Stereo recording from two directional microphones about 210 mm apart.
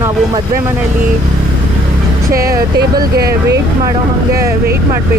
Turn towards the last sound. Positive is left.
turn(degrees=-50)  # may be behind; listen again after turning